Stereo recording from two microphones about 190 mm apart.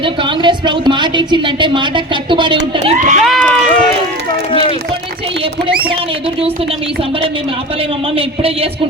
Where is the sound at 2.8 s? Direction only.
35° right (ahead or behind).